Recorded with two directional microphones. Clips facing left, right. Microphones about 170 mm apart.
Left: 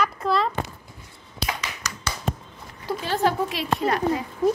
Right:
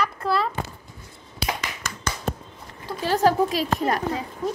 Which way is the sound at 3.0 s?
40° right (ahead or behind).